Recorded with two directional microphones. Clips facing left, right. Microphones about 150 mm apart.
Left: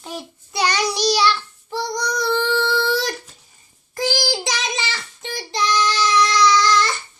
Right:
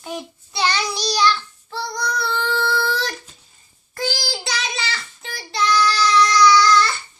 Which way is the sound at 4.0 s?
20° left (ahead or behind).